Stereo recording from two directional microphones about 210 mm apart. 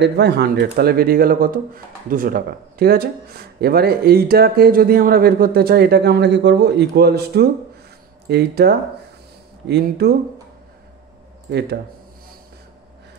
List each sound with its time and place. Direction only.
0.0 s speech: 50° right (ahead or behind)
11.5 s speech: 50° right (ahead or behind)